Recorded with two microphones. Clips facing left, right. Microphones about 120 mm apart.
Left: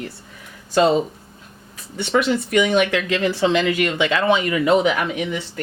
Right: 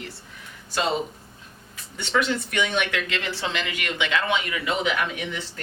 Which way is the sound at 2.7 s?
35° left (ahead or behind).